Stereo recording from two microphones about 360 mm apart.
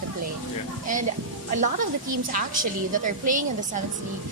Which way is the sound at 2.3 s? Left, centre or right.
Right.